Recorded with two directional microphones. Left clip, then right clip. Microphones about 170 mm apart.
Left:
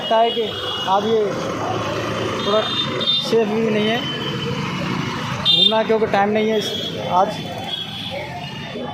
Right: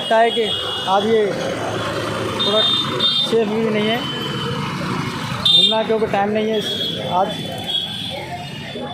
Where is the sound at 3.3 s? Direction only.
10° right (ahead or behind).